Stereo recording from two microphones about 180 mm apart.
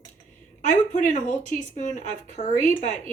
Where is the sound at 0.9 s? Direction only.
45° left (ahead or behind).